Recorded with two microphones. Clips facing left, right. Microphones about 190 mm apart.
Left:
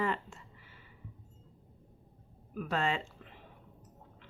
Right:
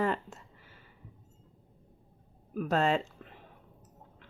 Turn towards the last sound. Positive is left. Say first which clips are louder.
# right 5 dB
turn(degrees=-40)  # may be behind; listen again after turning